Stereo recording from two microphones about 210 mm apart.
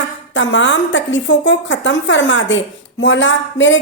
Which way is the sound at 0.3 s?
65° left (ahead or behind).